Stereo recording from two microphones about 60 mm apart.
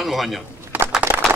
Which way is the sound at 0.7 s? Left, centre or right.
Right.